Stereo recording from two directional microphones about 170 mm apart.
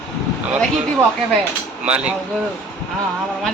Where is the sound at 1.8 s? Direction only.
10° right (ahead or behind).